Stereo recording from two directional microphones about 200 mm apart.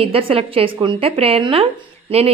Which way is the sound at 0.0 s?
25° right (ahead or behind).